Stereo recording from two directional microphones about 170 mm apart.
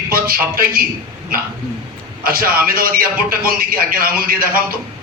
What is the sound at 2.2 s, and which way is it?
A man's voice, 60° right (ahead or behind).